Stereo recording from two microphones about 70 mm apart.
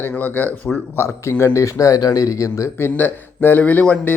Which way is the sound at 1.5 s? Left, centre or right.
Left.